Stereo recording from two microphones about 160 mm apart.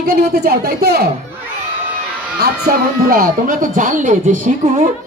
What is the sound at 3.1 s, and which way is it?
Speech, 65° right (ahead or behind).